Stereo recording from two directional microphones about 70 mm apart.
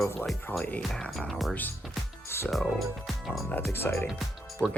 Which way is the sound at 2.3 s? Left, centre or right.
Left.